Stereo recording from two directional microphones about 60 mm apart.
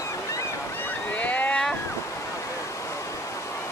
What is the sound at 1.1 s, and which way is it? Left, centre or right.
Boat, left.